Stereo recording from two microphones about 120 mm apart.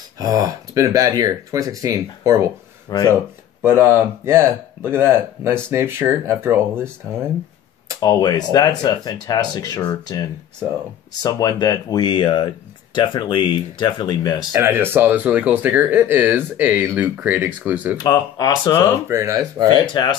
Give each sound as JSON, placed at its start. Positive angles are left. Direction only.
{"t": 0.2, "sound": "speech", "side_deg": -30}
{"t": 2.9, "sound": "speech", "side_deg": 30}
{"t": 3.6, "sound": "speech", "side_deg": -20}
{"t": 8.0, "sound": "speech", "side_deg": 35}
{"t": 11.2, "sound": "speech", "side_deg": 35}
{"t": 14.5, "sound": "speech", "side_deg": -20}
{"t": 17.9, "sound": "speech", "side_deg": 35}
{"t": 19.0, "sound": "speech", "side_deg": -25}
{"t": 19.9, "sound": "speech", "side_deg": 40}